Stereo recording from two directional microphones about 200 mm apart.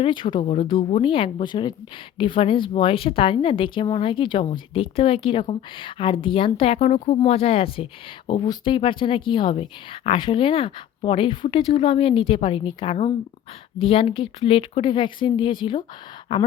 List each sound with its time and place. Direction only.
0.0 s speech: 25° left (ahead or behind)